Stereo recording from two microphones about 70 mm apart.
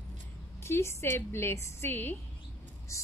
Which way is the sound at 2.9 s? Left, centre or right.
Left.